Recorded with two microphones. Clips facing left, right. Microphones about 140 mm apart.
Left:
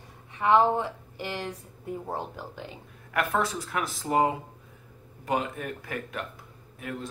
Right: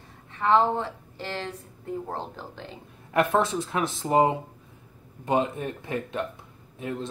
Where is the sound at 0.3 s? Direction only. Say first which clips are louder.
Even; 15° left (ahead or behind).